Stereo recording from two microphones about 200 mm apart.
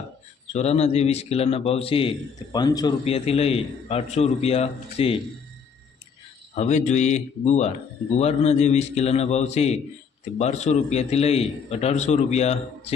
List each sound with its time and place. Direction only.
0.5 s a man's voice: 30° left (ahead or behind)
3.0 s a man's voice: 30° left (ahead or behind)
6.5 s a man's voice: 35° left (ahead or behind)